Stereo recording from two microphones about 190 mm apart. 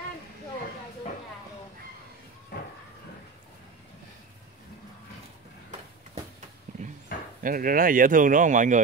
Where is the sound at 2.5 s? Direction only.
50° left (ahead or behind).